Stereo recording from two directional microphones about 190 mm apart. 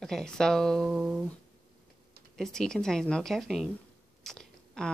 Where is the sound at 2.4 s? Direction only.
5° left (ahead or behind).